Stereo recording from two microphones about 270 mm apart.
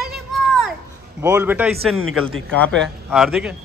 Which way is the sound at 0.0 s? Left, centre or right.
Centre.